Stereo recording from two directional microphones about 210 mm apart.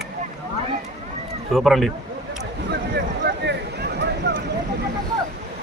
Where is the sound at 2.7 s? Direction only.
50° right (ahead or behind).